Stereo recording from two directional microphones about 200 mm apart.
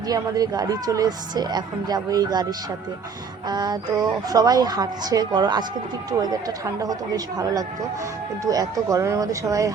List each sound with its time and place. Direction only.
0.1 s speech: 20° right (ahead or behind)